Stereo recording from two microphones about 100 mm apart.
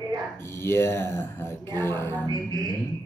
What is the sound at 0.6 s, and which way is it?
Speech, 25° left (ahead or behind).